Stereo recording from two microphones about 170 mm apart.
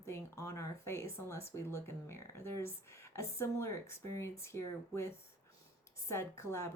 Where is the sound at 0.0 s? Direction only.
15° left (ahead or behind).